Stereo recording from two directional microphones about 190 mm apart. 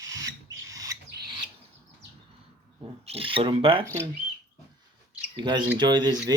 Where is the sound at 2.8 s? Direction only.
30° right (ahead or behind).